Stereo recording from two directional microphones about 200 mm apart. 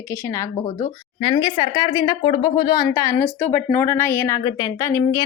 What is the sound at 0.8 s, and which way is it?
A woman's voice, 30° left (ahead or behind).